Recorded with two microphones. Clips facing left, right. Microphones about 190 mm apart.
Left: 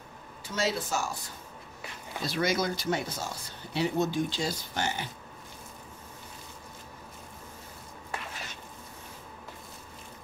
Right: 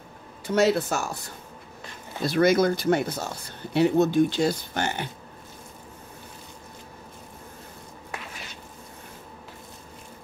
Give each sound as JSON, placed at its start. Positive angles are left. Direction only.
{"t": 0.5, "sound": "speech", "side_deg": -60}
{"t": 2.2, "sound": "speech", "side_deg": -55}